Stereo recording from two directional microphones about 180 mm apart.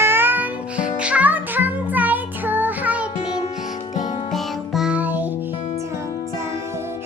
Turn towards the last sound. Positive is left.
turn(degrees=-15)  # may be behind; listen again after turning